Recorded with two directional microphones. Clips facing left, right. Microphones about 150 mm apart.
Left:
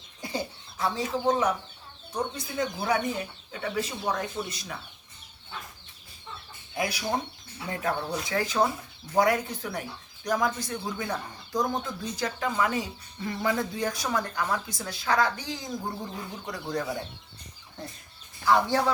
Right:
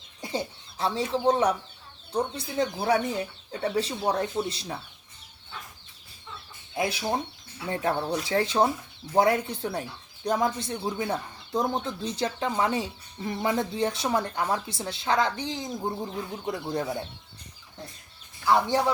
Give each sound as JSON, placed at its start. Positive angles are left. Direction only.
{"t": 0.2, "sound": "speech", "side_deg": -25}
{"t": 6.7, "sound": "speech", "side_deg": -25}